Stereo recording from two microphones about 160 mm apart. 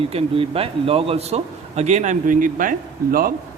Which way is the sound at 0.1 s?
35° right (ahead or behind).